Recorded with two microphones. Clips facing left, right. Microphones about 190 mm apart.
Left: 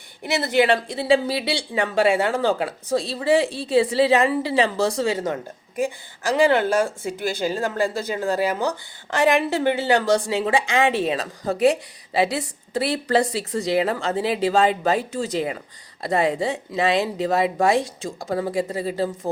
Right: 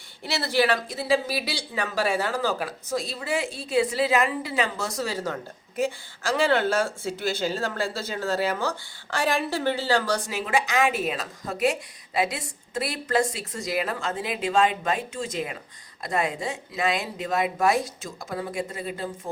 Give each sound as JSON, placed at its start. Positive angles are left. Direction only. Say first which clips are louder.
{"t": 0.3, "sound": "speech", "louder": "left 5 dB", "side_deg": 20}